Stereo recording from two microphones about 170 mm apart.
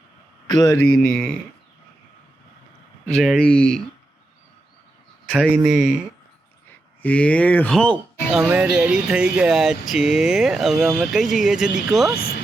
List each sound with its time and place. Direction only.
0.4 s a man's voice: 20° left (ahead or behind)
0.8 s speech: 10° left (ahead or behind)
3.1 s speech: centre (ahead or behind)
5.3 s speech: 5° right (ahead or behind)
6.7 s speech: 10° left (ahead or behind)